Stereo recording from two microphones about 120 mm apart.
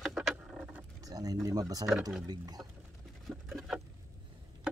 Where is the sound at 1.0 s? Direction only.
30° right (ahead or behind).